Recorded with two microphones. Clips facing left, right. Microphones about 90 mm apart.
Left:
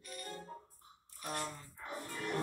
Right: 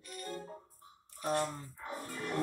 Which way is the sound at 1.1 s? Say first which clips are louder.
Right 8 dB; 30° right (ahead or behind).